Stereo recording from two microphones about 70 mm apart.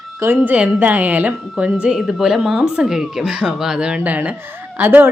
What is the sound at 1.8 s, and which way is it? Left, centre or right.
A woman's voice, centre.